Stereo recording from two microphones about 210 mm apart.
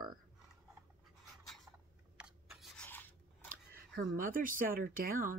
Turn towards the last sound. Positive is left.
turn(degrees=-40)  # may be behind; listen again after turning